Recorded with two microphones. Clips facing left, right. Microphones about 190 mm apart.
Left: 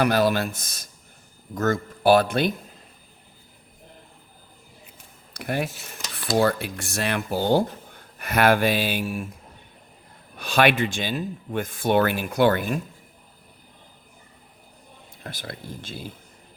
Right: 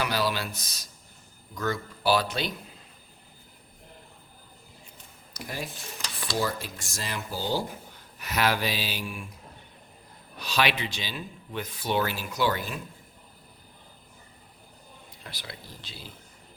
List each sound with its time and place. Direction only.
0.0 s speech: 50° left (ahead or behind)
5.3 s speech: 60° left (ahead or behind); by 9.3 s 45° left (ahead or behind)
10.3 s speech: 50° left (ahead or behind)
15.2 s speech: 50° left (ahead or behind)